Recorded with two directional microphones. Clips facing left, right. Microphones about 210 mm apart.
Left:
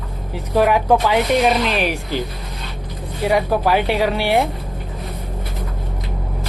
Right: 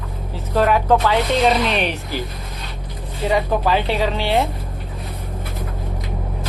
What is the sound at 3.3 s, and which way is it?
Speech, 10° left (ahead or behind).